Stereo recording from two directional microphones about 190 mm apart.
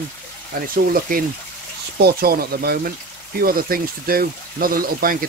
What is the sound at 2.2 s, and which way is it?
Speech, 55° right (ahead or behind).